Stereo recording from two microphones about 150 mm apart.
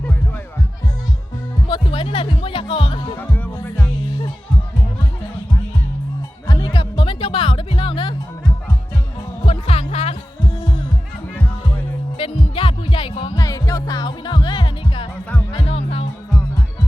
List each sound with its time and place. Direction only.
1.6 s music: 35° left (ahead or behind)
3.2 s music: 10° left (ahead or behind)
6.5 s music: 30° left (ahead or behind)
9.5 s music: 45° left (ahead or behind)
12.1 s music: 40° left (ahead or behind)